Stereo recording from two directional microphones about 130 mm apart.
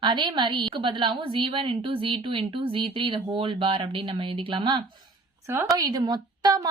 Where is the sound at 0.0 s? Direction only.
35° right (ahead or behind).